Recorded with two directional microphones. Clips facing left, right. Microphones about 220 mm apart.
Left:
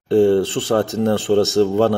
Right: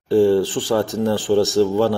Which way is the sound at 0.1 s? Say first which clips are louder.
Left 1 dB; 55° left (ahead or behind).